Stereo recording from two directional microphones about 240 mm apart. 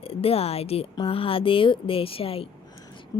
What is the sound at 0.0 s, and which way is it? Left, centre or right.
A woman's voice, left.